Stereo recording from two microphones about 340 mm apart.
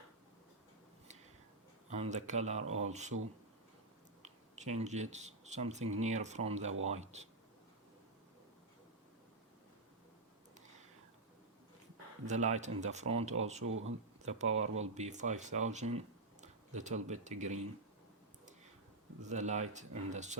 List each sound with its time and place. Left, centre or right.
1.9 s speech: centre
4.2 s speech: centre
12.2 s speech: right
13.7 s speech: right
14.2 s speech: centre
19.3 s speech: right